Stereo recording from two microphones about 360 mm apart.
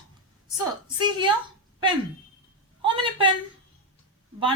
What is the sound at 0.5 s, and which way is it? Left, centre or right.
Speech, centre.